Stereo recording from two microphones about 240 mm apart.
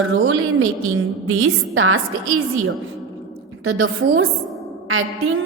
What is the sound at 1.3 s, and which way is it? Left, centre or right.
Speech, right.